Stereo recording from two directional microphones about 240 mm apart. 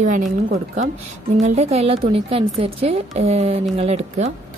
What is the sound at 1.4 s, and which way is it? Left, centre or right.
A woman's voice, right.